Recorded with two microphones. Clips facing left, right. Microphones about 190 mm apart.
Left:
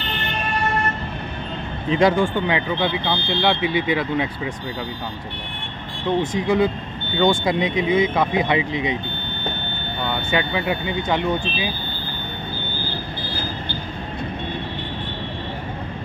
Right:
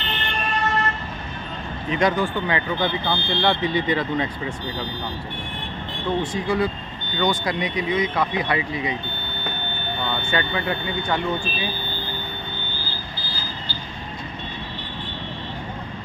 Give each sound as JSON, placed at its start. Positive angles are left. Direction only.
{"t": 1.9, "sound": "speech", "side_deg": 30}
{"t": 2.2, "sound": "speech", "side_deg": 15}
{"t": 6.3, "sound": "speech", "side_deg": 20}
{"t": 10.3, "sound": "speech", "side_deg": 15}
{"t": 13.2, "sound": "vehicle", "side_deg": 60}